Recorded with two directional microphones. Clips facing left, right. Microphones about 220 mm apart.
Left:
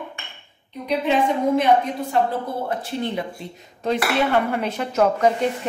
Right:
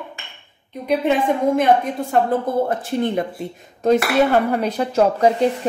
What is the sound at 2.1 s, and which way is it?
A woman's voice, 50° right (ahead or behind).